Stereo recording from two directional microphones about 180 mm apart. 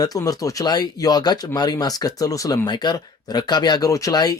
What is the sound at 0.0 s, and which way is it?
Speech, 20° left (ahead or behind).